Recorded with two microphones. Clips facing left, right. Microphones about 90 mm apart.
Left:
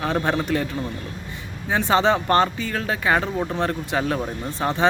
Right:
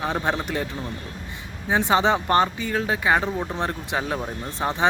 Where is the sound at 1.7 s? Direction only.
15° right (ahead or behind).